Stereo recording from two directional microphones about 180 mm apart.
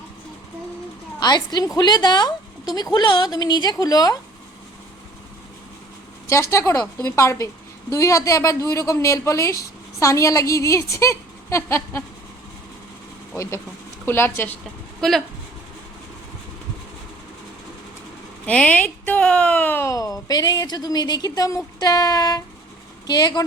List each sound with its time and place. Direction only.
1.2 s speech: 25° left (ahead or behind)
6.5 s a woman's voice: 15° left (ahead or behind)
13.3 s a woman's voice: 15° left (ahead or behind)
18.4 s speech: 5° left (ahead or behind)